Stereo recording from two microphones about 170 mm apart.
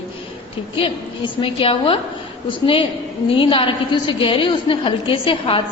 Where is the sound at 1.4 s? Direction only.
30° left (ahead or behind).